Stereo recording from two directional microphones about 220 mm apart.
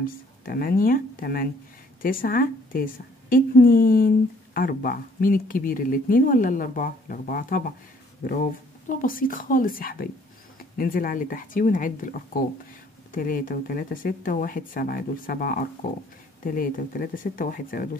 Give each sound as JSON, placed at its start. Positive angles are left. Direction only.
{"t": 0.0, "sound": "speech", "side_deg": 40}